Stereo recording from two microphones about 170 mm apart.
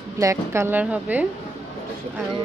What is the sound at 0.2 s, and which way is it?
A woman's voice, 20° right (ahead or behind).